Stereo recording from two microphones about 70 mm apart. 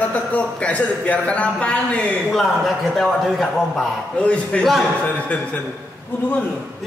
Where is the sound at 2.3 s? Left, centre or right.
Centre.